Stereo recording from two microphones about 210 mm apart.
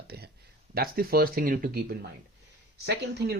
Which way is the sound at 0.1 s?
50° right (ahead or behind).